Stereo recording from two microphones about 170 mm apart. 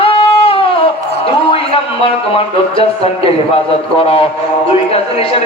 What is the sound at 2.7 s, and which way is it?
A man's voice, 35° left (ahead or behind).